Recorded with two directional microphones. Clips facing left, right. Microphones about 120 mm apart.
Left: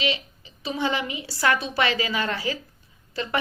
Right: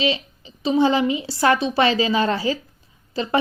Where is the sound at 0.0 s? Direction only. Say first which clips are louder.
Right 5 dB; 30° right (ahead or behind).